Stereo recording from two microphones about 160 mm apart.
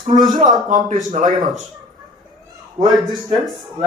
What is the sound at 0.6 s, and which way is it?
Speech, 55° right (ahead or behind).